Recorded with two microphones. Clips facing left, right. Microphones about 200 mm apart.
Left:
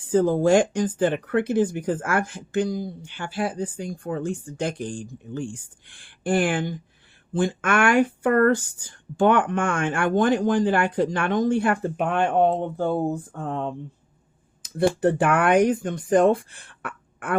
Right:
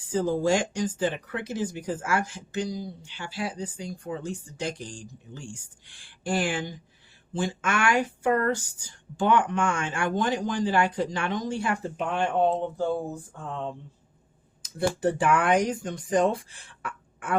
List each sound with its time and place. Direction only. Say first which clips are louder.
0.0 s speech: left 6 dB; 55° left (ahead or behind)
15.0 s speech: left 1 dB; 55° left (ahead or behind)